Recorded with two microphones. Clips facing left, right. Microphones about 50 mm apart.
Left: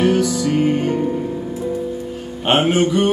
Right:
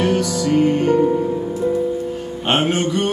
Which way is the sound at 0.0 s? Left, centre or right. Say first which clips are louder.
Left 2 dB; centre.